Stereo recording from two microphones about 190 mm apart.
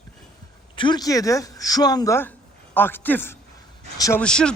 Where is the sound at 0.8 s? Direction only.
25° left (ahead or behind).